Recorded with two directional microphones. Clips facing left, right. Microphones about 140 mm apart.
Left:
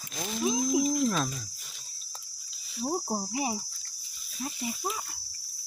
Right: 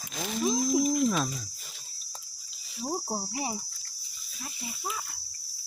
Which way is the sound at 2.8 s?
5° left (ahead or behind).